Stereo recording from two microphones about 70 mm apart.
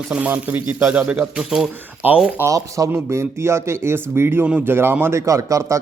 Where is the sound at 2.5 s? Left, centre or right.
Right.